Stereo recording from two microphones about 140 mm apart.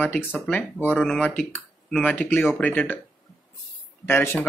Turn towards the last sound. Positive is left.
turn(degrees=15)  # may be behind; listen again after turning